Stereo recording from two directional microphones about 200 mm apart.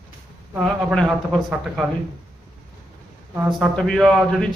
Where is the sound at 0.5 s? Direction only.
Centre (ahead or behind).